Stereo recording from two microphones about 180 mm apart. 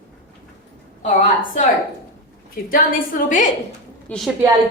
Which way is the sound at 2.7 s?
50° left (ahead or behind).